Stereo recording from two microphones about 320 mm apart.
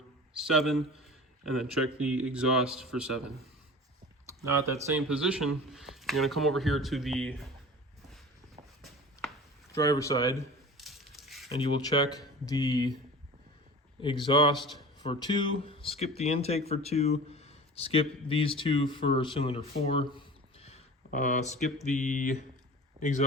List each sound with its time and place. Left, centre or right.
0.3 s speech: centre
4.4 s speech: centre
8.6 s walk: centre
9.7 s speech: centre
10.8 s a sound: centre
11.4 s speech: centre
14.0 s speech: centre
14.5 s speech: centre
15.0 s speech: centre
19.7 s a sound: centre
23.0 s speech: left